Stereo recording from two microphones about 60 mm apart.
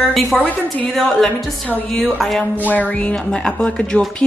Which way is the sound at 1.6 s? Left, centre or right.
Centre.